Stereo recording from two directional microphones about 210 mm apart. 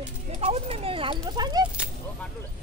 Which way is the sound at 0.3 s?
30° right (ahead or behind).